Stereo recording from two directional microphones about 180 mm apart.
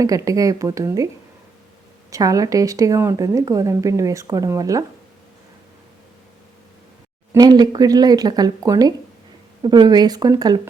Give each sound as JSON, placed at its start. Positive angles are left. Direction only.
{"t": 0.0, "sound": "speech", "side_deg": -20}
{"t": 2.0, "sound": "speech", "side_deg": -20}
{"t": 7.3, "sound": "speech", "side_deg": -20}